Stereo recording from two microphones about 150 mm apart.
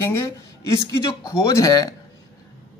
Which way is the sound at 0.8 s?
25° left (ahead or behind).